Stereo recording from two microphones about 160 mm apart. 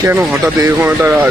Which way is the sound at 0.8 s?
10° right (ahead or behind).